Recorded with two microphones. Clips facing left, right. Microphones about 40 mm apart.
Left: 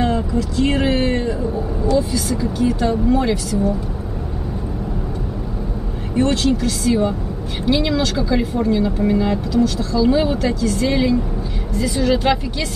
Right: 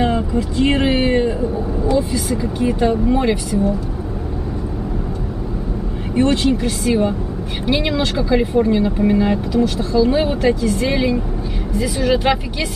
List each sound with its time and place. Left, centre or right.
0.0 s speech: right
6.1 s speech: right